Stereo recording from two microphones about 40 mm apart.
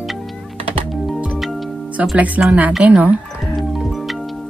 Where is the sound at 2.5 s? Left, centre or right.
Right.